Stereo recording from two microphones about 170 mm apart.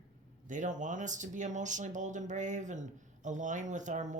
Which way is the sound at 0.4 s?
45° right (ahead or behind).